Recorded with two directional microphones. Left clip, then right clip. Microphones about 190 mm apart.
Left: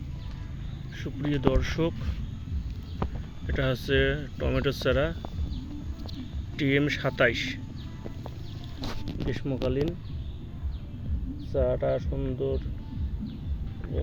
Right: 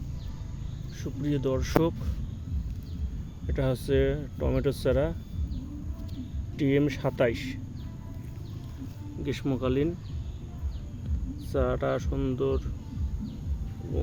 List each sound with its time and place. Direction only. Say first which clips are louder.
1.0 s speech: left 2 dB; 10° right (ahead or behind)
3.4 s speech: left 1 dB; 10° right (ahead or behind)
6.6 s speech: left 1 dB; 15° right (ahead or behind)
9.2 s speech: right 1 dB; 25° right (ahead or behind)
11.5 s speech: left 2 dB; 15° right (ahead or behind)